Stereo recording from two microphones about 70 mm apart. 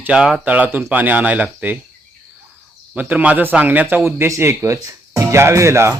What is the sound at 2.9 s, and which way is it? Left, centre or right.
A man's voice, right.